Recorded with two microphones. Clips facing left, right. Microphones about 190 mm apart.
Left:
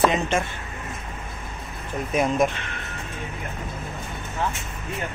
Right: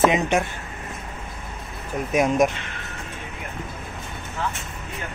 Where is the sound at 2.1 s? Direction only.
10° right (ahead or behind).